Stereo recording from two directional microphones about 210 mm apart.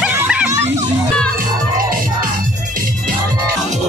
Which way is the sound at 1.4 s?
40° right (ahead or behind).